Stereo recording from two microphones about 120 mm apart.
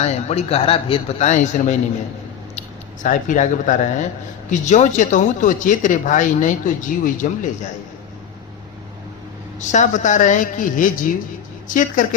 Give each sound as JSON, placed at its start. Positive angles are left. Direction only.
{"t": 0.0, "sound": "a man's voice", "side_deg": 65}
{"t": 1.2, "sound": "a man's voice", "side_deg": 80}
{"t": 3.0, "sound": "speech", "side_deg": 90}
{"t": 9.6, "sound": "speech", "side_deg": 85}